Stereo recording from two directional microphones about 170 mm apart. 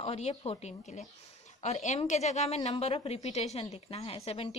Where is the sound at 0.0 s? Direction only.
35° left (ahead or behind).